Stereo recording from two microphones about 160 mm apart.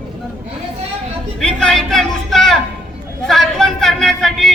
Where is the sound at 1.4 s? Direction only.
5° left (ahead or behind).